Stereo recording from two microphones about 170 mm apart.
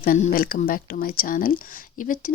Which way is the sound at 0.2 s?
55° left (ahead or behind).